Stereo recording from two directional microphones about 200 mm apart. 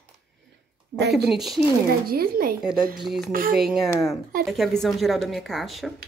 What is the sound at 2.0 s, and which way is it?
Speech, 50° right (ahead or behind).